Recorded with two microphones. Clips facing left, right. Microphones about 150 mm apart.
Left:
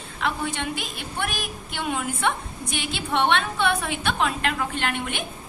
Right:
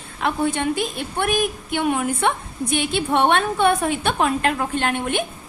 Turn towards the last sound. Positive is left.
turn(degrees=-45)  # may be behind; listen again after turning